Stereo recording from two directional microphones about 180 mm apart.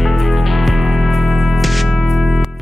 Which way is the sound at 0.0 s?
Centre (ahead or behind).